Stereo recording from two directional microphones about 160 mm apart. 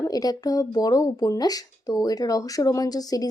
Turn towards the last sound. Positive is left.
turn(degrees=25)  # may be behind; listen again after turning